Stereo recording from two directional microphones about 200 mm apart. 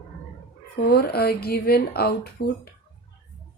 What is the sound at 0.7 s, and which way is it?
Speech, 55° left (ahead or behind).